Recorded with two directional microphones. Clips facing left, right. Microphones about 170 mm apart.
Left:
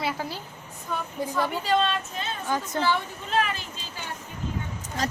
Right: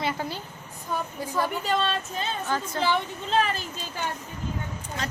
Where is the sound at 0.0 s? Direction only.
Centre (ahead or behind).